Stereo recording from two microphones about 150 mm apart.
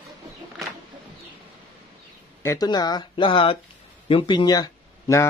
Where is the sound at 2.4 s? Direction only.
25° left (ahead or behind).